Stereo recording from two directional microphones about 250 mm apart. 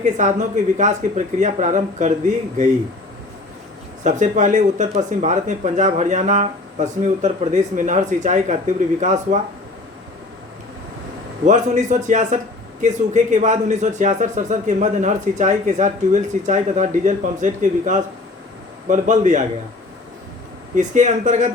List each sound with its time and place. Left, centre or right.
0.0 s a man's voice: right
4.0 s a man's voice: right
11.4 s a man's voice: right
20.7 s a man's voice: right